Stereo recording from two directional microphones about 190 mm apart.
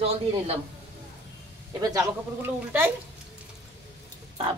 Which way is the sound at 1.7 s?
20° right (ahead or behind).